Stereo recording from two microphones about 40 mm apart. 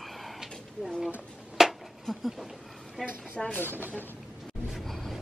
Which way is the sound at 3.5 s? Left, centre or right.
Left.